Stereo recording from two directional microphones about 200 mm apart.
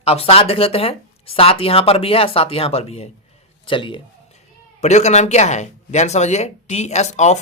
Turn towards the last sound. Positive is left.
turn(degrees=35)  # may be behind; listen again after turning